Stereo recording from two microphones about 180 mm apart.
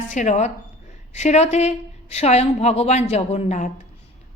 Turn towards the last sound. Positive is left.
turn(degrees=40)  # may be behind; listen again after turning